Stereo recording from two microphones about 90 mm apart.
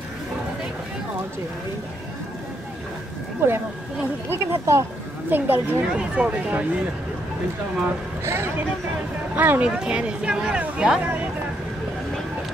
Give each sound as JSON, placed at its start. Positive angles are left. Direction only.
{"t": 3.4, "sound": "speech", "side_deg": -25}
{"t": 8.2, "sound": "speech", "side_deg": -30}